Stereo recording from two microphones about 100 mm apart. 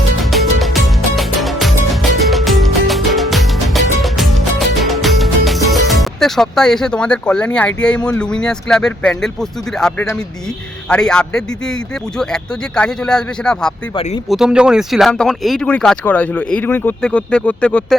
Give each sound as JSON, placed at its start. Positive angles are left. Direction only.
{"t": 0.2, "sound": "music", "side_deg": 0}
{"t": 8.2, "sound": "speech", "side_deg": 10}
{"t": 14.3, "sound": "speech", "side_deg": -5}
{"t": 17.0, "sound": "speech", "side_deg": 10}